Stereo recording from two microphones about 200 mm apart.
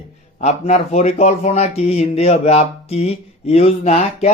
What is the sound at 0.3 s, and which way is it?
Speech, 35° left (ahead or behind).